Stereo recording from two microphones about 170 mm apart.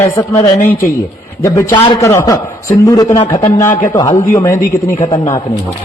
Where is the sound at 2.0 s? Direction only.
15° left (ahead or behind).